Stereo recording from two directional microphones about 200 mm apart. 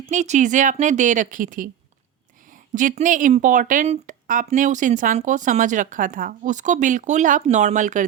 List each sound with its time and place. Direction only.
0.1 s speech: 35° right (ahead or behind)